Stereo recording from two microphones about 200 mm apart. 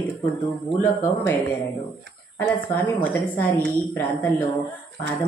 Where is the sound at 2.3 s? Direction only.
10° left (ahead or behind).